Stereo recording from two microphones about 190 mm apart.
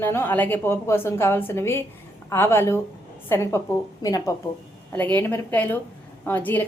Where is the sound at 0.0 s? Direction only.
10° left (ahead or behind).